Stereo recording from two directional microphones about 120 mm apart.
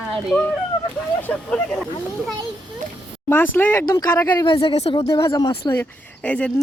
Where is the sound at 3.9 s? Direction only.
30° left (ahead or behind).